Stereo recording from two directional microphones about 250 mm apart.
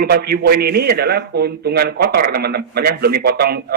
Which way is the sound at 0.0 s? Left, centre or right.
Right.